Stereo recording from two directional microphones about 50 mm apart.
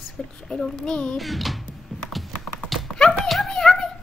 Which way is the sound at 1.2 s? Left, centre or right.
Centre.